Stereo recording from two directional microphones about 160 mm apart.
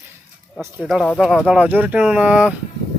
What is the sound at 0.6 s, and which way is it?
Speech, 15° right (ahead or behind).